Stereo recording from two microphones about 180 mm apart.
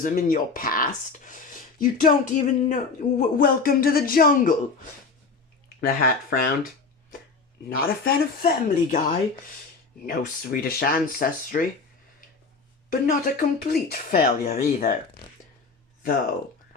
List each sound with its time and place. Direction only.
0.0 s speech: 50° left (ahead or behind)
5.6 s speech: 55° left (ahead or behind)
7.8 s speech: 55° left (ahead or behind)
10.1 s speech: 55° left (ahead or behind)
12.9 s speech: 50° left (ahead or behind)